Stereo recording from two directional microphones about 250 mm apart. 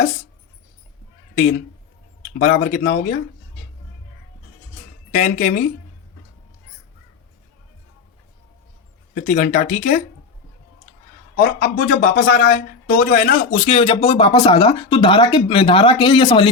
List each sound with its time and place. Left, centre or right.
2.3 s speech: left
5.2 s speech: left
9.1 s speech: left
11.3 s speech: left; by 16.5 s centre